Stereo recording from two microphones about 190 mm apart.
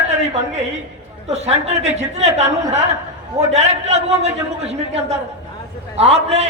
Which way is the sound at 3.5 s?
35° right (ahead or behind).